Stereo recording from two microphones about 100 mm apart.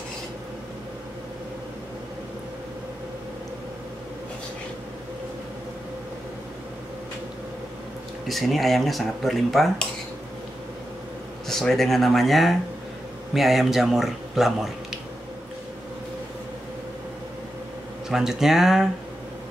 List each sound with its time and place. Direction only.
8.3 s speech: centre (ahead or behind)
11.4 s speech: 5° left (ahead or behind)
18.1 s speech: 5° right (ahead or behind)